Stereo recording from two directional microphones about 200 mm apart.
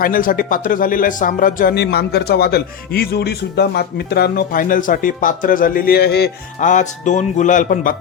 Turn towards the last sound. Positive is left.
turn(degrees=40)  # may be behind; listen again after turning